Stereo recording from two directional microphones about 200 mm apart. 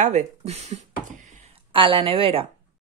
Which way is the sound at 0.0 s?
35° right (ahead or behind).